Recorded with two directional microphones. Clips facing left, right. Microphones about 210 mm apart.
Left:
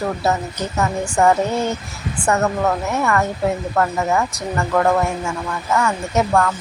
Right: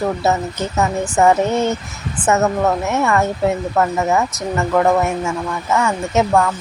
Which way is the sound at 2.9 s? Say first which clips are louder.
Right 2 dB; 25° right (ahead or behind).